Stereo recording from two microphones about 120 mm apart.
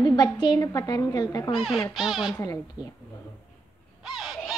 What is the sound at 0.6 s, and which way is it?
Speech, 30° left (ahead or behind).